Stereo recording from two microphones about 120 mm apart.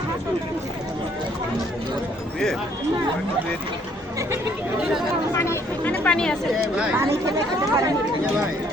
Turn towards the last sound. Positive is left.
turn(degrees=-25)  # may be behind; listen again after turning